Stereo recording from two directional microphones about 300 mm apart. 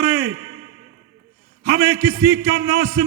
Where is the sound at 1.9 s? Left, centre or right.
Right.